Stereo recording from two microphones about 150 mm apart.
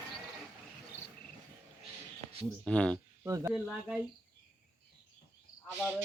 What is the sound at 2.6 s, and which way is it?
Speech, 5° left (ahead or behind).